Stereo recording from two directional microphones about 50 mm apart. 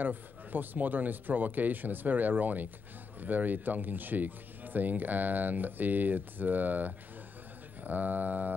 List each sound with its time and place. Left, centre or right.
0.0 s speech: right